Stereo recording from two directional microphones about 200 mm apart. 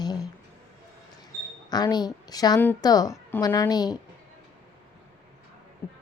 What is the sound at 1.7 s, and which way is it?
Speech, 20° left (ahead or behind).